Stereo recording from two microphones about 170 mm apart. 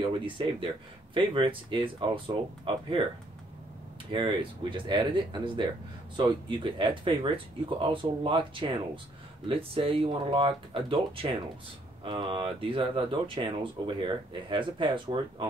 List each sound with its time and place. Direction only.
0.0 s speech: 30° right (ahead or behind)
4.1 s speech: 30° right (ahead or behind)